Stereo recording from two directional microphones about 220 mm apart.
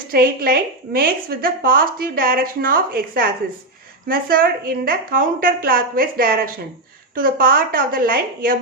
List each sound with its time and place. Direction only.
0.1 s a woman's voice: 45° right (ahead or behind)